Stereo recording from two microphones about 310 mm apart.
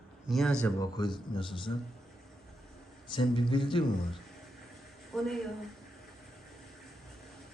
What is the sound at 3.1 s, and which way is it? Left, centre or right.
Speech, centre.